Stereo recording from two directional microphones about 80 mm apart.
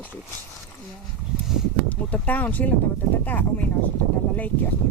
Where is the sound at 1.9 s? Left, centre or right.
Centre.